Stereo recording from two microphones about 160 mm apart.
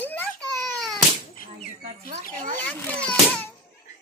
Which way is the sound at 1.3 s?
60° left (ahead or behind).